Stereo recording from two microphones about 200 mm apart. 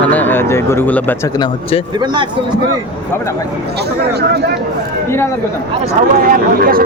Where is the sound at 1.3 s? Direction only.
25° left (ahead or behind).